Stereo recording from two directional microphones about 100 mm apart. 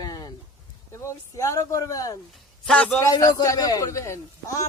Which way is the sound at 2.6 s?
10° left (ahead or behind).